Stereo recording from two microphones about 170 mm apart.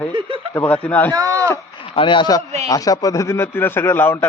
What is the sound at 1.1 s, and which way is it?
Speech, 20° right (ahead or behind).